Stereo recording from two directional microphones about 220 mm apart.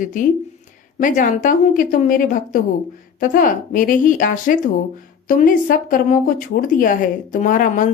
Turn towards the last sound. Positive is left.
turn(degrees=35)  # may be behind; listen again after turning